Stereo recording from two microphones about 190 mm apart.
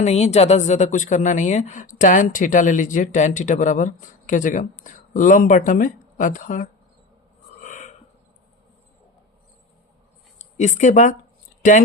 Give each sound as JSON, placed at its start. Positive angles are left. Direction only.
{"t": 0.0, "sound": "speech", "side_deg": 35}
{"t": 7.6, "sound": "a sound", "side_deg": 40}
{"t": 10.3, "sound": "speech", "side_deg": 40}